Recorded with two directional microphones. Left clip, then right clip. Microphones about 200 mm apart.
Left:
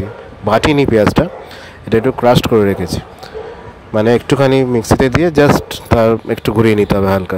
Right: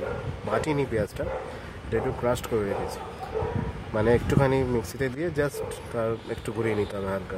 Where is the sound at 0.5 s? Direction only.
40° left (ahead or behind).